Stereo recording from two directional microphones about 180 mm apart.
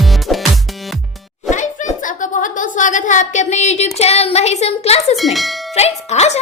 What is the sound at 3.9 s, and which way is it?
A woman's voice, 35° left (ahead or behind).